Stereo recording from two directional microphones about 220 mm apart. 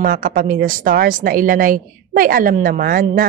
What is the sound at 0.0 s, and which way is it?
A woman's voice, 40° right (ahead or behind).